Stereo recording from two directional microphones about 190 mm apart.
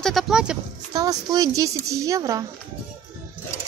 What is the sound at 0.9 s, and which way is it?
Speech, 20° right (ahead or behind).